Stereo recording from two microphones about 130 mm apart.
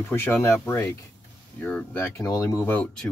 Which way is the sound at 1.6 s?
10° left (ahead or behind).